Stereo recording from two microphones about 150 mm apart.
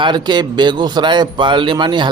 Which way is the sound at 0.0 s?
30° right (ahead or behind).